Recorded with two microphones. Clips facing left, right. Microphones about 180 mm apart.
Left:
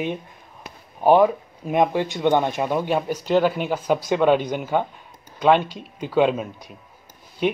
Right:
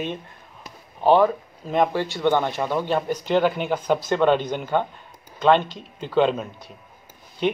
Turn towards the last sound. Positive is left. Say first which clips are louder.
# left 1 dB
turn(degrees=5)  # may be behind; listen again after turning